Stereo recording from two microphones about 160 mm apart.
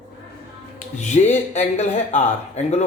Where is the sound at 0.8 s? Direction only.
45° left (ahead or behind).